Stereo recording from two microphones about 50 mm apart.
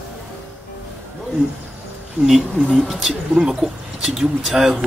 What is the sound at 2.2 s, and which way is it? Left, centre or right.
Speech, centre.